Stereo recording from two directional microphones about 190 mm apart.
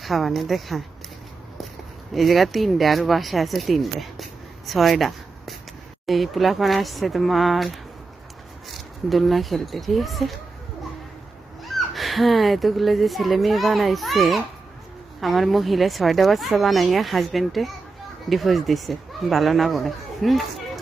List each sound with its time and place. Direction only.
0.0 s speech: centre (ahead or behind)
2.1 s speech: centre (ahead or behind)
11.7 s a child's voice: centre (ahead or behind)